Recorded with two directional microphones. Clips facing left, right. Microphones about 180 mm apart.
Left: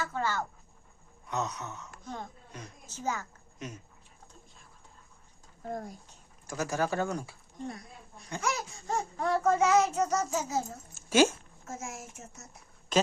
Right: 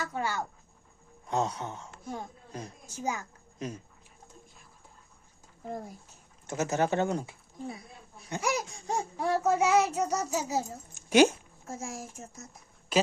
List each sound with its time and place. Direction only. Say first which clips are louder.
0.0 s a child's voice: even; 15° right (ahead or behind)
1.3 s a woman's voice: right 4 dB; 30° right (ahead or behind)
2.8 s a child's voice: even; 10° right (ahead or behind)
5.6 s speech: left 1 dB; 5° right (ahead or behind)
6.5 s speech: right 3 dB; 20° right (ahead or behind)
7.6 s a sound: even; 5° right (ahead or behind)
8.3 s a child's voice: right 3 dB; 15° right (ahead or behind)
11.6 s a child's voice: right 2 dB; 30° right (ahead or behind)
12.9 s speech: right 1 dB; 10° right (ahead or behind)